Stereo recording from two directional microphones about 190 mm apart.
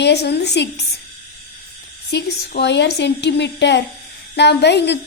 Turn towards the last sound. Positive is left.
turn(degrees=65)  # may be behind; listen again after turning